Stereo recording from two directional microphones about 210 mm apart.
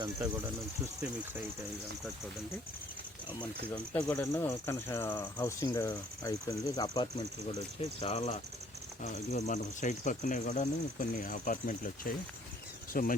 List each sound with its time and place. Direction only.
3.9 s speech: 15° left (ahead or behind)
8.0 s speech: 30° left (ahead or behind)